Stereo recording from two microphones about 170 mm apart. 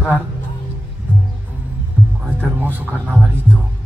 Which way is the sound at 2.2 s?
10° right (ahead or behind).